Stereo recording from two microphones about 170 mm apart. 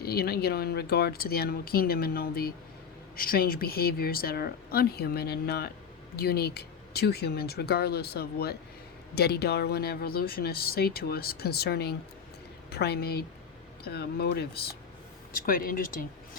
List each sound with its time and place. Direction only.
0.0 s speech: 65° left (ahead or behind)
15.4 s speech: 60° left (ahead or behind)